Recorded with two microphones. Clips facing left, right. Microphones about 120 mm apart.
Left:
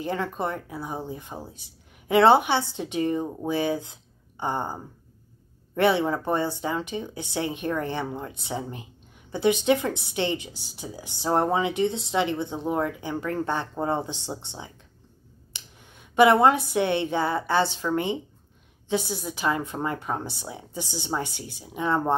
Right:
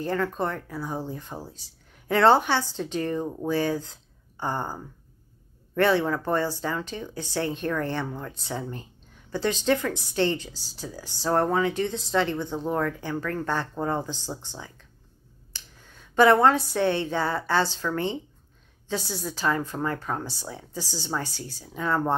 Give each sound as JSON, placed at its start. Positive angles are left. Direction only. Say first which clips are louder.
{"t": 0.0, "sound": "speech", "louder": "right 1 dB", "side_deg": 15}
{"t": 15.5, "sound": "a sound", "louder": "even", "side_deg": 20}
{"t": 16.7, "sound": "a woman's voice", "louder": "left 1 dB", "side_deg": 15}